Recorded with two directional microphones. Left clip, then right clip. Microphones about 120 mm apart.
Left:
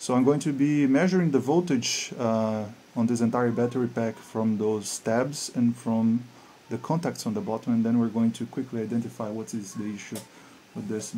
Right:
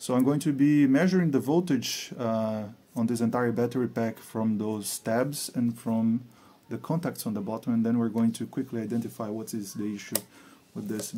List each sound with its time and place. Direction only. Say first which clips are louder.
0.0 s speech: left 3 dB; 25° right (ahead or behind)